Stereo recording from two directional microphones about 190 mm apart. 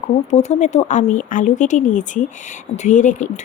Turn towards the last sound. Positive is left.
turn(degrees=40)  # may be behind; listen again after turning